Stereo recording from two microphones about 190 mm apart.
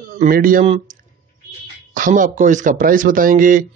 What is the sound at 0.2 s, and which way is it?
Speech, 45° right (ahead or behind).